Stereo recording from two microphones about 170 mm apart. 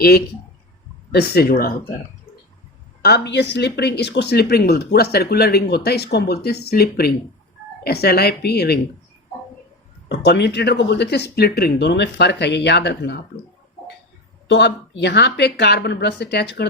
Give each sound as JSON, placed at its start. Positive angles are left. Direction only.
{"t": 1.1, "sound": "speech", "side_deg": 65}
{"t": 3.0, "sound": "speech", "side_deg": 80}
{"t": 10.1, "sound": "speech", "side_deg": 80}
{"t": 14.4, "sound": "speech", "side_deg": 90}